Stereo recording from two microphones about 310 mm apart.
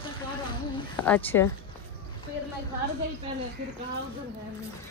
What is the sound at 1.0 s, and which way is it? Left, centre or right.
Speech, centre.